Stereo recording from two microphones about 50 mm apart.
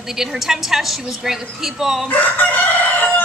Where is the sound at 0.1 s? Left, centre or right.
Centre.